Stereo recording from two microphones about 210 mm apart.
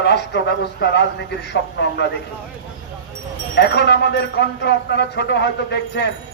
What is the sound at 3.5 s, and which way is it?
Speech, 55° left (ahead or behind).